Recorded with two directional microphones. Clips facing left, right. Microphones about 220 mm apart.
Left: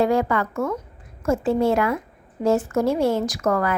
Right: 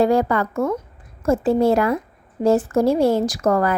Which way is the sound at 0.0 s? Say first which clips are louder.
Right 3 dB; 35° right (ahead or behind).